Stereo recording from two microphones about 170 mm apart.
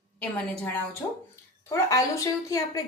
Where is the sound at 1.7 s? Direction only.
20° left (ahead or behind).